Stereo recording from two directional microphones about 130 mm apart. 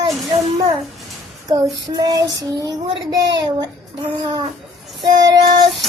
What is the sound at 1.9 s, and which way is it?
Speech, 30° right (ahead or behind).